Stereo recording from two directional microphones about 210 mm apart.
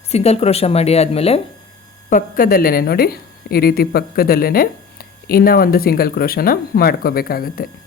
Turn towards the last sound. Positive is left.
turn(degrees=45)  # may be behind; listen again after turning